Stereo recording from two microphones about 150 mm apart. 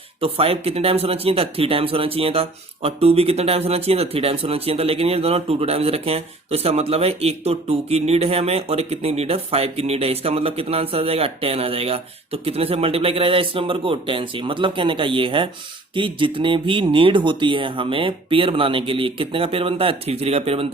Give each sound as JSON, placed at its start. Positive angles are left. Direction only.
{"t": 0.2, "sound": "speech", "side_deg": -40}